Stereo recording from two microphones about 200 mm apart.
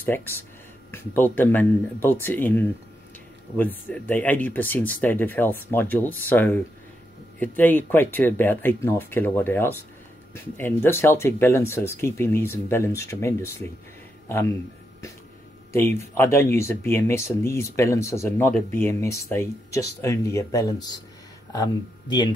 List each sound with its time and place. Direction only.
0.0 s speech: 10° left (ahead or behind)
15.7 s speech: 10° left (ahead or behind)